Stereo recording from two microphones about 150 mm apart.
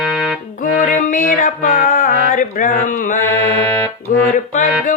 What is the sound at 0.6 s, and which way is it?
Music, 60° left (ahead or behind).